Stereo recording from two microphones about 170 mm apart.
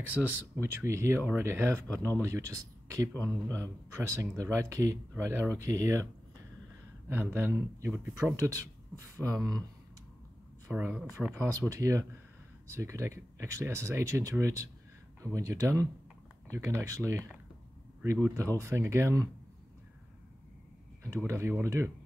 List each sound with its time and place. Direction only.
0.0 s speech: 10° right (ahead or behind)
7.1 s speech: 10° right (ahead or behind)
10.7 s speech: 10° right (ahead or behind)
21.0 s speech: 15° right (ahead or behind)